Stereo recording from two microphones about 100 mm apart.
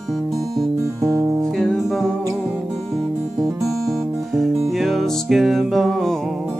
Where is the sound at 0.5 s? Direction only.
30° right (ahead or behind).